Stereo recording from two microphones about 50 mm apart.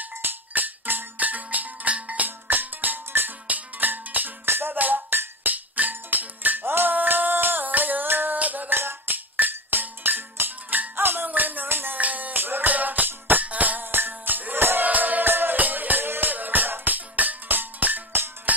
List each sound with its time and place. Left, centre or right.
0.0 s music: right
2.2 s music: right
8.7 s music: right
12.0 s music: right
14.9 s music: right